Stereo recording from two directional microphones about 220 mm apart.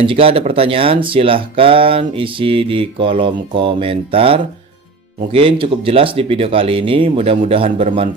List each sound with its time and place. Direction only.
0.0 s speech: 25° right (ahead or behind)